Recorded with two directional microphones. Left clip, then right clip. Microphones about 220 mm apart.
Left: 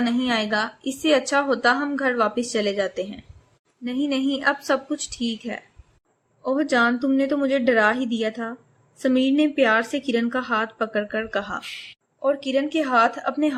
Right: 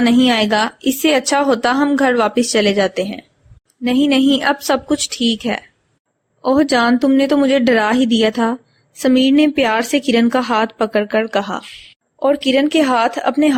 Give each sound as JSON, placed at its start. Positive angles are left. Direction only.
{"t": 0.0, "sound": "a woman's voice", "side_deg": -30}